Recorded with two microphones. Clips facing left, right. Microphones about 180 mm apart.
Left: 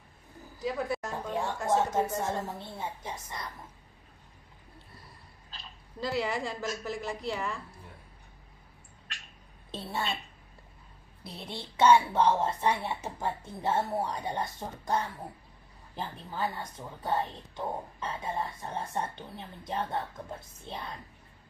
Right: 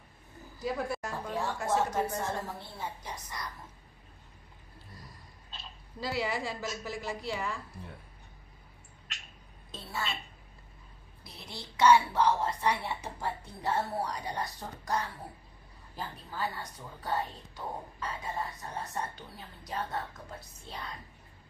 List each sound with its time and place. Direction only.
0.6 s a woman's voice: centre (ahead or behind)
1.1 s a sound: 25° left (ahead or behind)
1.7 s speech: 25° left (ahead or behind)
5.9 s a woman's voice: 5° right (ahead or behind)
9.7 s a woman's voice: 30° left (ahead or behind)
11.3 s speech: 30° left (ahead or behind)